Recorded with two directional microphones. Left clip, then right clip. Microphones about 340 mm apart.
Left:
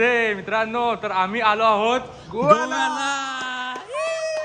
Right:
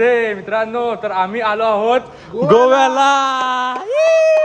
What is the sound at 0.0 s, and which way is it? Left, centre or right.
A man's voice, centre.